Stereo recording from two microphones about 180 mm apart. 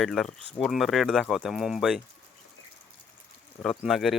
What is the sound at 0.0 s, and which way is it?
Speech, centre (ahead or behind).